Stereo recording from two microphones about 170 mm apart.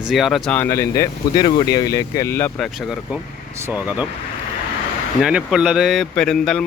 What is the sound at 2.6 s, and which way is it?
Speech, centre (ahead or behind).